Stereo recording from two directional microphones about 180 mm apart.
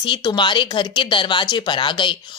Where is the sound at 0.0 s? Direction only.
25° left (ahead or behind).